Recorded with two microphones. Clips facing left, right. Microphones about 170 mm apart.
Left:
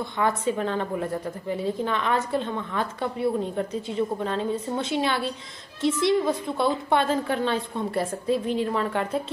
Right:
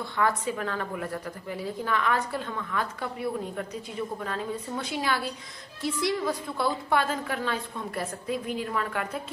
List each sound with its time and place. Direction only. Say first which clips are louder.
0.0 s a woman's voice: left 3 dB; 25° left (ahead or behind)